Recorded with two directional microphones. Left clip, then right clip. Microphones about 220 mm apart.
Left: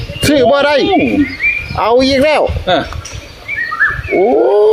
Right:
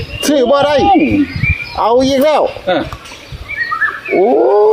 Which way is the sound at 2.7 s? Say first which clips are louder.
Left 3 dB; 50° left (ahead or behind).